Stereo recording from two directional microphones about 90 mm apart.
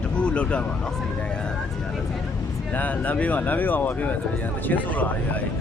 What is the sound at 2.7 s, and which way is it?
Speech, 15° left (ahead or behind).